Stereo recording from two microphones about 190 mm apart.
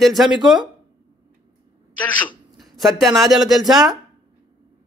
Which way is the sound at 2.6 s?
Centre (ahead or behind).